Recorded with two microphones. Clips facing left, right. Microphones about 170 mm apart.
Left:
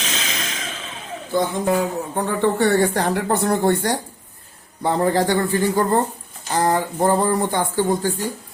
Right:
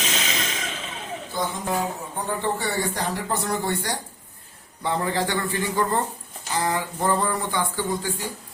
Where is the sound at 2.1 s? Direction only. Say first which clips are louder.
Left 8 dB; 65° left (ahead or behind).